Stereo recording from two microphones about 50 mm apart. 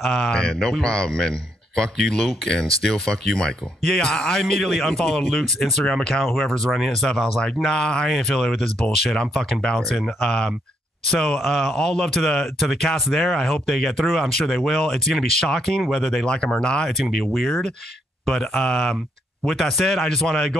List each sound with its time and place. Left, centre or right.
0.1 s a man's voice: centre
7.7 s a man's voice: centre
9.8 s a man's voice: centre
17.0 s a man's voice: centre